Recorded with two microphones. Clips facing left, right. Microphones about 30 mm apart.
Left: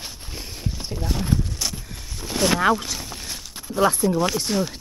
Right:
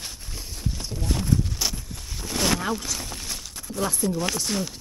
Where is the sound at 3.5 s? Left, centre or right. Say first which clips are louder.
Left 9 dB; left.